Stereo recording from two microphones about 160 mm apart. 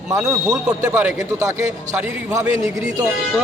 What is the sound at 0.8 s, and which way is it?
Speech, 20° right (ahead or behind).